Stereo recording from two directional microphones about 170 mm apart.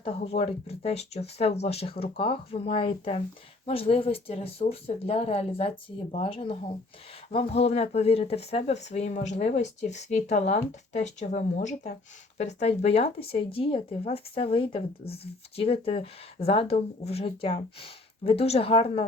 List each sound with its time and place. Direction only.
0.0 s speech: 35° left (ahead or behind)